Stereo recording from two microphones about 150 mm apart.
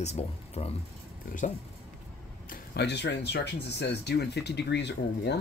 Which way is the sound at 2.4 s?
80° left.